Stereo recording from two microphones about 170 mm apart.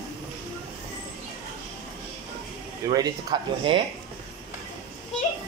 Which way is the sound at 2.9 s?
25° right (ahead or behind).